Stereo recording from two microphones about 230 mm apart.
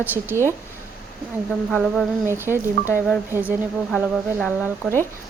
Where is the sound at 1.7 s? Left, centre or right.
Centre.